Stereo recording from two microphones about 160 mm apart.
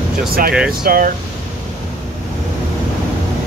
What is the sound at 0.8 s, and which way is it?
Speech, 60° right (ahead or behind).